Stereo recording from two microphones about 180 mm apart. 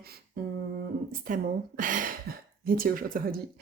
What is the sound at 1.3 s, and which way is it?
Speech, 45° right (ahead or behind).